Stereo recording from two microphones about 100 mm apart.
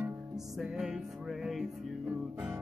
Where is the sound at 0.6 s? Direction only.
5° right (ahead or behind).